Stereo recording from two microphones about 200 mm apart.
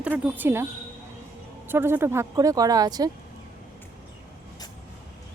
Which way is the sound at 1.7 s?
10° right (ahead or behind).